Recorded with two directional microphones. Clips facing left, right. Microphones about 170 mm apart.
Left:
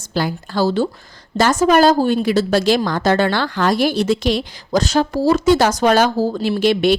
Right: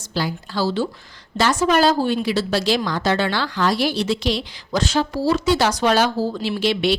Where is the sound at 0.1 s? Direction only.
50° left (ahead or behind).